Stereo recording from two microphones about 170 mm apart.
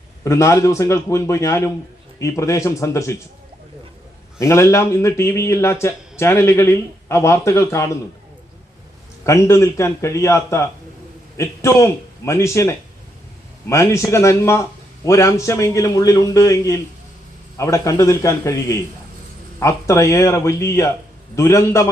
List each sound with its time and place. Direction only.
0.3 s speech: 15° left (ahead or behind)
4.4 s speech: 15° left (ahead or behind)
9.2 s speech: 15° left (ahead or behind)